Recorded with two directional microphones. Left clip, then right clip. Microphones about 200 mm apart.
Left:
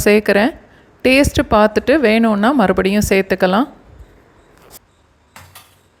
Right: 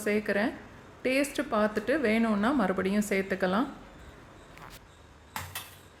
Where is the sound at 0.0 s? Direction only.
45° left (ahead or behind).